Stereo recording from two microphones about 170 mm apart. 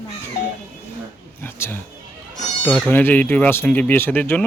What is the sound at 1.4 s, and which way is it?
Speech, 15° left (ahead or behind).